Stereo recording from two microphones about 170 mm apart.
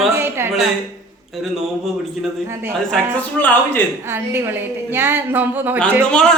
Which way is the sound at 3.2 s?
10° left (ahead or behind).